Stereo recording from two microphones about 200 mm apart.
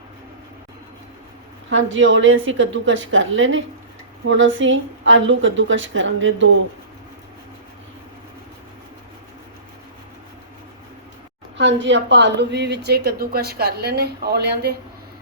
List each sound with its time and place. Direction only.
1.7 s a woman's voice: 70° right (ahead or behind)
11.5 s a woman's voice: 65° right (ahead or behind)